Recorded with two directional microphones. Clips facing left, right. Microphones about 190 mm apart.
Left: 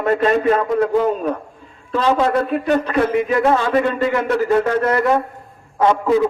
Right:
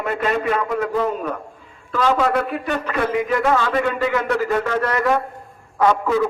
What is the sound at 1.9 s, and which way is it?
A man's voice, 30° left (ahead or behind).